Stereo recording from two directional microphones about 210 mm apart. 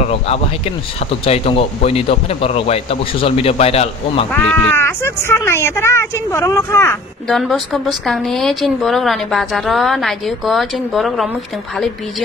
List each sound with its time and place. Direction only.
0.0 s speech: 30° left (ahead or behind)
4.3 s speech: 10° left (ahead or behind)
7.2 s speech: centre (ahead or behind)